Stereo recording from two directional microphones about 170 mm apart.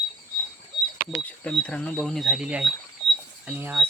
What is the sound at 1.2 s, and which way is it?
Speech, 5° left (ahead or behind).